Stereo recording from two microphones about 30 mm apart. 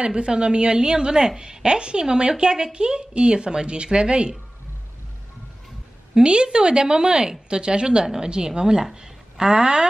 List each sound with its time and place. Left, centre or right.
0.0 s a woman's voice: right
6.1 s a woman's voice: right